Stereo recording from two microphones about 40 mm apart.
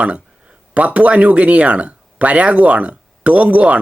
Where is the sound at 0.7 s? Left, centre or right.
Right.